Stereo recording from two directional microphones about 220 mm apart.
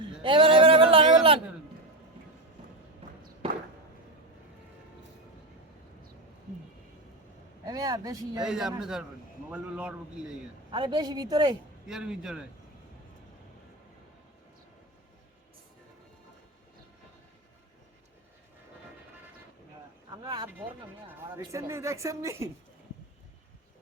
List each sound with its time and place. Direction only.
0.2 s a sound: 25° right (ahead or behind)
3.4 s a sound: 25° right (ahead or behind)
7.6 s vehicle: 15° right (ahead or behind)
8.4 s a man's voice: 5° right (ahead or behind)
10.7 s a woman's voice: 20° right (ahead or behind)
11.9 s a man's voice: 5° right (ahead or behind)
20.2 s a woman's voice: 15° right (ahead or behind)